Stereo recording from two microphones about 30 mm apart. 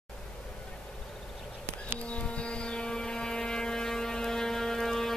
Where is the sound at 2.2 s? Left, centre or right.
Left.